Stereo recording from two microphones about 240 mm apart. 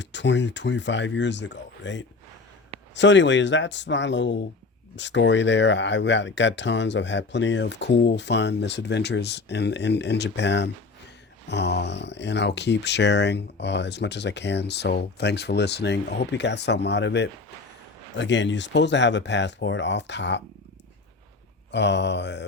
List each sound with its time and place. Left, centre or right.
0.0 s speech: left
21.7 s speech: left